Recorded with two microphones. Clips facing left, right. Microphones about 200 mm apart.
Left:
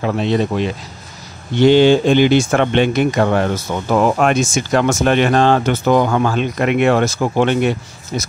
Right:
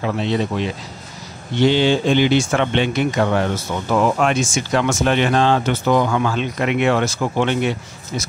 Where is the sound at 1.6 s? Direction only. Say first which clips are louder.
Left 6 dB; 50° left (ahead or behind).